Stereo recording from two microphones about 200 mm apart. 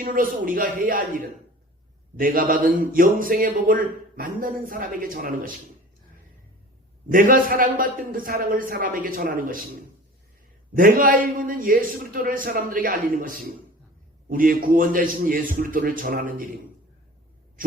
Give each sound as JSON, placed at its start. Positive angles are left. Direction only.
{"t": 0.0, "sound": "speech", "side_deg": -45}
{"t": 2.1, "sound": "speech", "side_deg": -45}
{"t": 7.1, "sound": "speech", "side_deg": -45}
{"t": 10.8, "sound": "speech", "side_deg": -45}